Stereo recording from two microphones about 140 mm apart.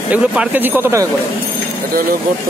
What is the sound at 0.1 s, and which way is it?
Speech, 10° right (ahead or behind).